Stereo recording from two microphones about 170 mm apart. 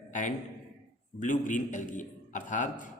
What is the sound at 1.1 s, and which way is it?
Speech, 50° left (ahead or behind).